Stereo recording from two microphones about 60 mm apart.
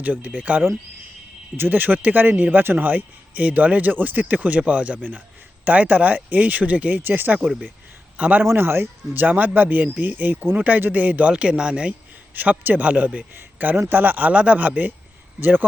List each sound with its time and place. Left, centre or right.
0.0 s speech: right
1.5 s speech: right
8.1 s a man's voice: centre
8.4 s speech: right
11.3 s speech: centre
12.3 s speech: right